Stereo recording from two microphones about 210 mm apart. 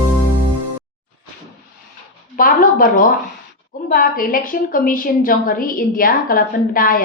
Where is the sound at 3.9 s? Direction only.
45° left (ahead or behind).